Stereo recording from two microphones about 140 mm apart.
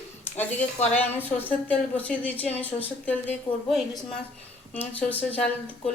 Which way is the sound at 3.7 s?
Centre (ahead or behind).